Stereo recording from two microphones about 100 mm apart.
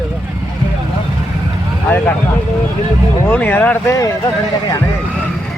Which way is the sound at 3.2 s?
20° left (ahead or behind).